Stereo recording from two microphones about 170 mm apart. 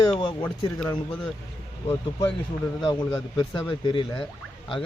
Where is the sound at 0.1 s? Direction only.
25° left (ahead or behind).